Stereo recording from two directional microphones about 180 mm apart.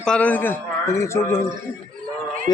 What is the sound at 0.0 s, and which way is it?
A man's voice, 5° left (ahead or behind).